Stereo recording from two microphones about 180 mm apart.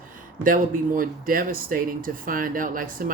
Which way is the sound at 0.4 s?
50° right (ahead or behind).